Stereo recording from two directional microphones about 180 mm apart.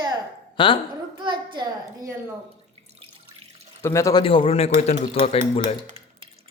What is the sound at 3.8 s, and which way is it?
Speech, 15° left (ahead or behind).